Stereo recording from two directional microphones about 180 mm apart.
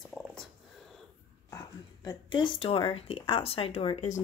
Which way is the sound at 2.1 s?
25° left (ahead or behind).